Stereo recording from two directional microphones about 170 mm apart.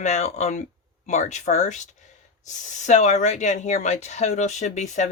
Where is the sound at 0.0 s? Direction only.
40° left (ahead or behind).